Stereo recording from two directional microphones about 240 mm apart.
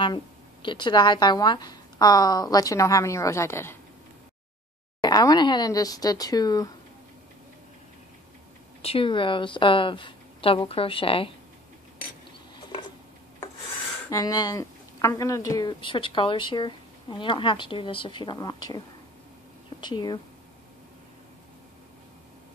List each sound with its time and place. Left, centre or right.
0.0 s a woman's voice: centre
5.0 s a woman's voice: centre
8.8 s a woman's voice: left
14.1 s a woman's voice: centre
19.8 s a woman's voice: centre